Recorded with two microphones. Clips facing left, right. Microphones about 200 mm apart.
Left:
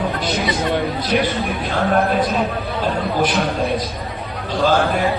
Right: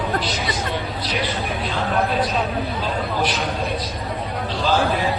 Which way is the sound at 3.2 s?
50° left (ahead or behind).